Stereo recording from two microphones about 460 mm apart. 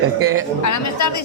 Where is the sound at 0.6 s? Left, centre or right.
Left.